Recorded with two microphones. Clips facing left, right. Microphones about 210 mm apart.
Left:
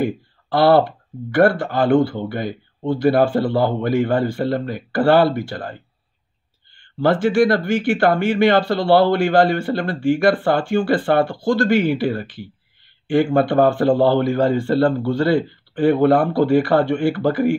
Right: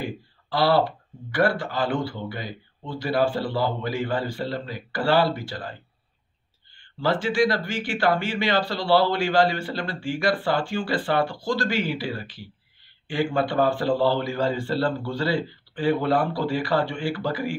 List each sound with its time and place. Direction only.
0.0 s speech: 55° left (ahead or behind)
7.0 s a man's voice: 55° left (ahead or behind)